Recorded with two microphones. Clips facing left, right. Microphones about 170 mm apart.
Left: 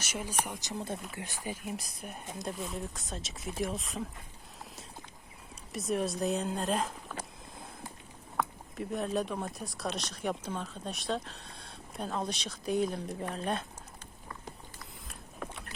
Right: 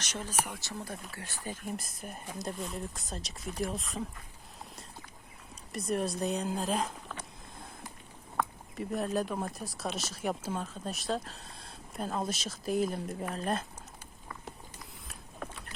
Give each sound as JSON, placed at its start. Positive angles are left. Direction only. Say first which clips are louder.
{"t": 0.0, "sound": "speech", "louder": "even", "side_deg": 10}
{"t": 1.7, "sound": "speech", "louder": "even", "side_deg": 0}
{"t": 5.7, "sound": "speech", "louder": "even", "side_deg": 0}
{"t": 8.4, "sound": "speech", "louder": "even", "side_deg": 0}